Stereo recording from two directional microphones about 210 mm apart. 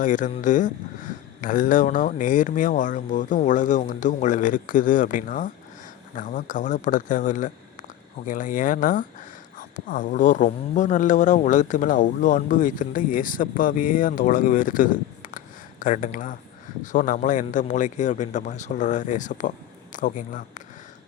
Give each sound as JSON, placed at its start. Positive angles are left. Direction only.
{"t": 0.0, "sound": "speech", "side_deg": 40}